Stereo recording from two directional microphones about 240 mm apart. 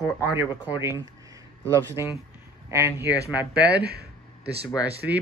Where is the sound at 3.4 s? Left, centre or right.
Centre.